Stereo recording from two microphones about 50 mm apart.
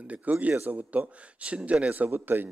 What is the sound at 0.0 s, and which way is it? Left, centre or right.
A man's voice, right.